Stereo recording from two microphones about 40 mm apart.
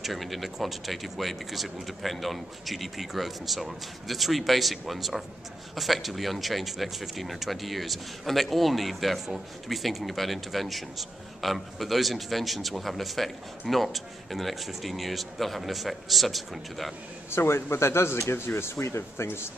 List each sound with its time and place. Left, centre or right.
0.0 s speech: centre
17.3 s speech: left